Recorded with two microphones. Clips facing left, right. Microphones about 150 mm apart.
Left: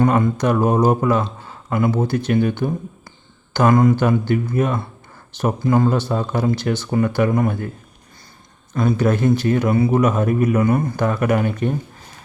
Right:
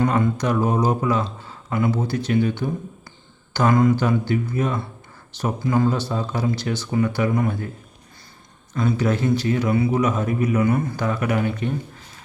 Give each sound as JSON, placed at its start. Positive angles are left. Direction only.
{"t": 0.0, "sound": "a man's voice", "side_deg": 50}
{"t": 8.7, "sound": "a man's voice", "side_deg": 45}